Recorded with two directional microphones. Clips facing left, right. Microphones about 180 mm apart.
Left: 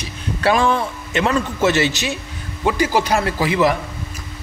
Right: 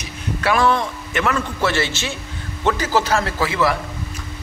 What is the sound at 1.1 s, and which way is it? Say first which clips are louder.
A man's voice: left 3 dB; 25° left (ahead or behind).